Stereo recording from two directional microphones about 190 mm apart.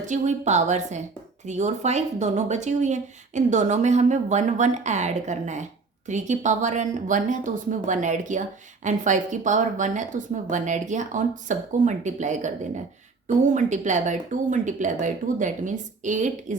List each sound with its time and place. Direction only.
0.0 s speech: 40° right (ahead or behind)